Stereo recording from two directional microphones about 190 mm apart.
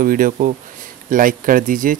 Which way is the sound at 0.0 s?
50° right (ahead or behind).